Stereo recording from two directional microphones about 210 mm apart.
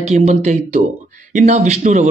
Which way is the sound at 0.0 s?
35° right (ahead or behind).